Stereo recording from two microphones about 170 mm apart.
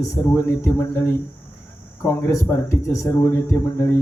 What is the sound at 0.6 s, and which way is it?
Speech, 15° left (ahead or behind).